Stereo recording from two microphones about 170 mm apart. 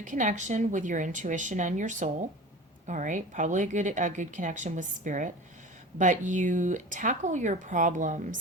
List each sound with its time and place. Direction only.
0.0 s a woman's voice: 50° right (ahead or behind)